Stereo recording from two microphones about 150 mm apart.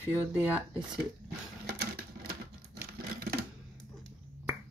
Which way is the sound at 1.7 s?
90° right.